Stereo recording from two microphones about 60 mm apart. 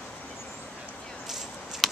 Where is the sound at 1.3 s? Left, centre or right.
Centre.